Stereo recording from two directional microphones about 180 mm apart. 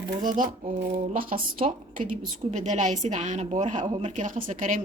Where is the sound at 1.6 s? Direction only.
35° right (ahead or behind).